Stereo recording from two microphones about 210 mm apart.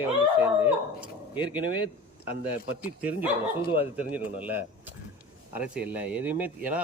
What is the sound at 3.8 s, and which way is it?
A man's voice, 10° right (ahead or behind).